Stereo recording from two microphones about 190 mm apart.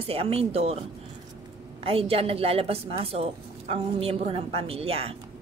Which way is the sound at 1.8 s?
30° right (ahead or behind).